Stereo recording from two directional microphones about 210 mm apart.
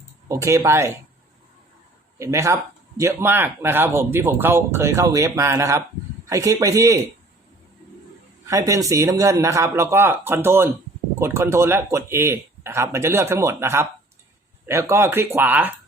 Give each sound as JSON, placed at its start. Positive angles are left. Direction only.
{"t": 0.3, "sound": "a man's voice", "side_deg": -15}
{"t": 2.1, "sound": "a man's voice", "side_deg": -15}
{"t": 8.4, "sound": "a man's voice", "side_deg": -15}